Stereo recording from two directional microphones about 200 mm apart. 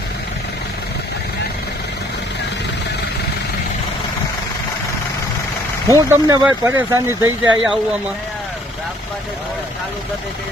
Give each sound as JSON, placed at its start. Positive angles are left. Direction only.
{"t": 5.9, "sound": "speech", "side_deg": -15}